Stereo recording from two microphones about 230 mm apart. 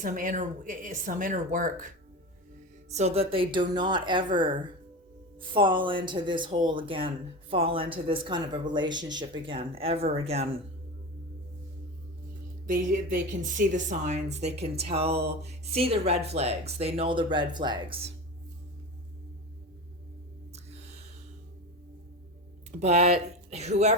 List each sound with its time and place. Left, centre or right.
0.0 s speech: right
2.9 s speech: right
12.6 s speech: right
22.8 s speech: right